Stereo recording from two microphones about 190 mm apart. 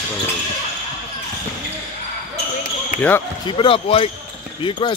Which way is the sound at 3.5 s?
25° left (ahead or behind).